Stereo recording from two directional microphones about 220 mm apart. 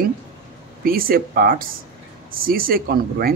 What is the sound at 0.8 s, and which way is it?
Speech, 40° right (ahead or behind).